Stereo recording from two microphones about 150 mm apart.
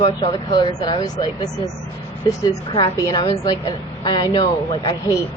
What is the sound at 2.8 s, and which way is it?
A woman's voice, 25° left (ahead or behind).